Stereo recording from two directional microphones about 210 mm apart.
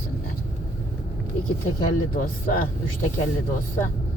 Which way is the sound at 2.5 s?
45° left (ahead or behind).